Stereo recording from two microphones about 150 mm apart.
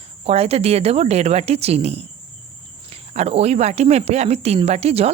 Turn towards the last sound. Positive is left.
turn(degrees=-45)  # may be behind; listen again after turning